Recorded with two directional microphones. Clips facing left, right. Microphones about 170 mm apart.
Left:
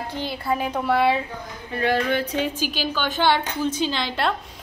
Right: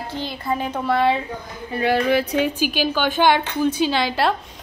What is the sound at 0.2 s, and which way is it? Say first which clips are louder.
Speech: even; 10° left (ahead or behind).